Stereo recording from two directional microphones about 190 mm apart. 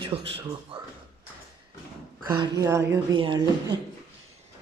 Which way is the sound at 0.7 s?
25° right (ahead or behind).